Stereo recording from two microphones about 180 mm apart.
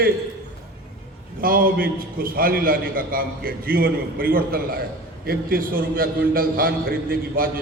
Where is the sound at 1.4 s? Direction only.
55° right (ahead or behind).